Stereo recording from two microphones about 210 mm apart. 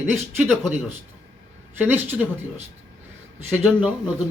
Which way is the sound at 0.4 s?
5° left (ahead or behind).